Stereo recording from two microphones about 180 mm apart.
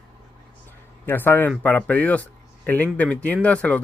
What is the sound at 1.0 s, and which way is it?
Speech, 10° left (ahead or behind).